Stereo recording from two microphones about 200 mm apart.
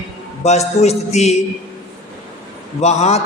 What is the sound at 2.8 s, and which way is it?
Speech, 35° left (ahead or behind).